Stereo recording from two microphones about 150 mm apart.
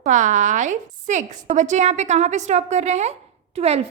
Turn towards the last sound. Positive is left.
turn(degrees=-45)  # may be behind; listen again after turning